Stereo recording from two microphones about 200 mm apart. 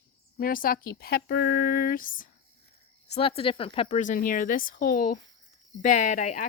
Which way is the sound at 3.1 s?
30° left (ahead or behind).